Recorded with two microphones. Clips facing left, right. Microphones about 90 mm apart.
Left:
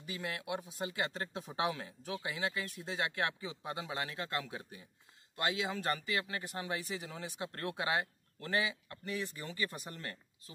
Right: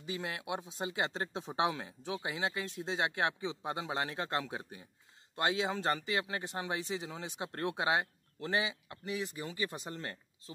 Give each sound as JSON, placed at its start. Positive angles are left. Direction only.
{"t": 0.0, "sound": "speech", "side_deg": -25}